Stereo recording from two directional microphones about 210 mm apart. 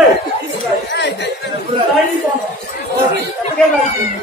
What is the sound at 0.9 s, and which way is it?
Chatter, 55° left (ahead or behind).